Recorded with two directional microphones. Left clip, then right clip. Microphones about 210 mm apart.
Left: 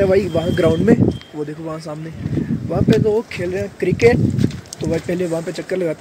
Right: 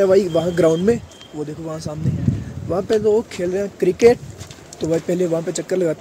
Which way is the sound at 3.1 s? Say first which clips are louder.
Right 1 dB; 10° right (ahead or behind).